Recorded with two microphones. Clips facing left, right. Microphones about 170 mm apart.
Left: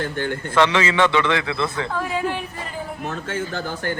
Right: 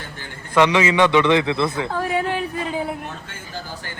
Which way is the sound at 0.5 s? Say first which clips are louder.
Right 3 dB; 15° right (ahead or behind).